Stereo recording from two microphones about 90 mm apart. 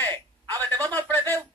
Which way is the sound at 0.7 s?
40° right (ahead or behind).